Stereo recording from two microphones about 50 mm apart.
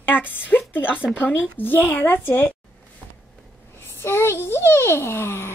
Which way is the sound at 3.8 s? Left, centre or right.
Left.